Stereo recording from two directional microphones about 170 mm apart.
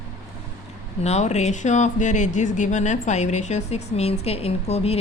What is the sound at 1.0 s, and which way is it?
Speech, 40° left (ahead or behind).